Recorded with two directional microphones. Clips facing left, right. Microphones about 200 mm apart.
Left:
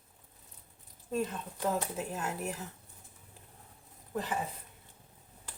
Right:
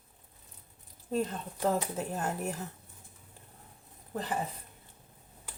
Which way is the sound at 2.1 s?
45° right (ahead or behind).